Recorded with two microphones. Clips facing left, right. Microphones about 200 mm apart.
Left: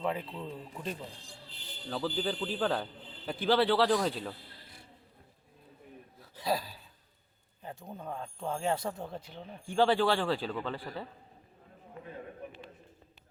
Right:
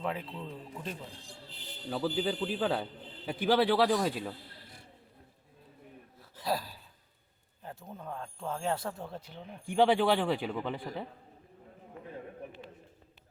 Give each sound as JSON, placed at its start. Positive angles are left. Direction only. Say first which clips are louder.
{"t": 0.0, "sound": "speech", "louder": "left 2 dB", "side_deg": 0}
{"t": 1.9, "sound": "a man's voice", "louder": "right 2 dB", "side_deg": -10}
{"t": 6.3, "sound": "a sound", "louder": "left 1 dB", "side_deg": -5}
{"t": 7.9, "sound": "speech", "louder": "left 1 dB", "side_deg": 15}
{"t": 8.6, "sound": "speech", "louder": "left 1 dB", "side_deg": 0}
{"t": 9.0, "sound": "speech", "louder": "left 1 dB", "side_deg": 10}
{"t": 9.3, "sound": "a man's voice", "louder": "right 1 dB", "side_deg": -15}